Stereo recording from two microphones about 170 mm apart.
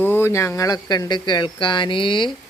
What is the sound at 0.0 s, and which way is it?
Speech, 15° left (ahead or behind).